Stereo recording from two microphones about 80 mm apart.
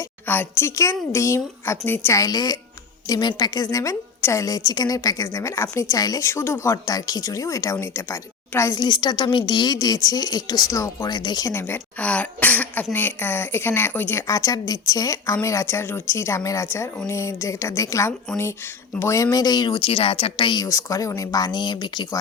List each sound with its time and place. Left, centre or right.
0.3 s speech: left
0.8 s speech: left
2.1 s a woman's voice: left
4.9 s speech: left
6.0 s a woman's voice: left
6.2 s speech: left
6.9 s speech: left
8.7 s a woman's voice: left
11.1 s a woman's voice: left
11.5 s speech: left
11.9 s speech: centre
14.3 s a woman's voice: left
20.6 s a woman's voice: left
21.3 s a woman's voice: left